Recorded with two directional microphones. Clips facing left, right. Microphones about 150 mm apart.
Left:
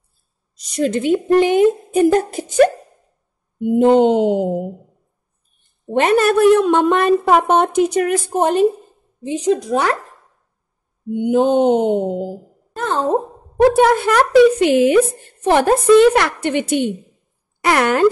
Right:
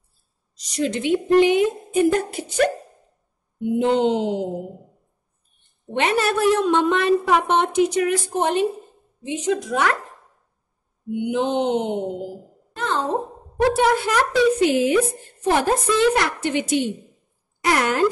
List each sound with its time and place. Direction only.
0.6 s a woman's voice: 50° left (ahead or behind)
5.6 s a woman's voice: 45° left (ahead or behind)
11.1 s a woman's voice: 45° left (ahead or behind); by 18.0 s 65° left (ahead or behind)